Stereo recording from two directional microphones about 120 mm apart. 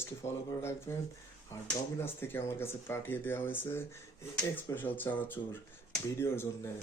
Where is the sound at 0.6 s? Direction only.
20° left (ahead or behind).